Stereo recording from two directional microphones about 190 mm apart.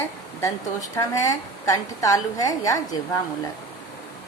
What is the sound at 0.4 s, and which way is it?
A woman's voice, 15° left (ahead or behind).